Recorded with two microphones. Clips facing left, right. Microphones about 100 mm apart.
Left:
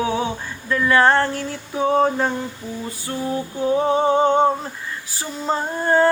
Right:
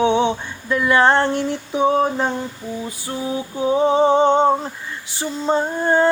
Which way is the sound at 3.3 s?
15° right (ahead or behind).